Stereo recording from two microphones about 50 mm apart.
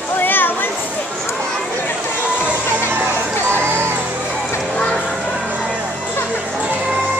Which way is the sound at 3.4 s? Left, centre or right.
Right.